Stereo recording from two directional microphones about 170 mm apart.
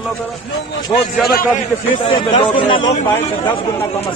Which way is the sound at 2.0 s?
30° left (ahead or behind).